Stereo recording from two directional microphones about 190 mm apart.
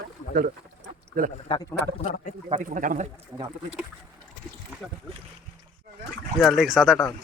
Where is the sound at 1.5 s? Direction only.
20° left (ahead or behind).